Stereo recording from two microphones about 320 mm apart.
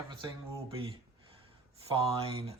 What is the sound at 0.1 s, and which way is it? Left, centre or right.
Speech, centre.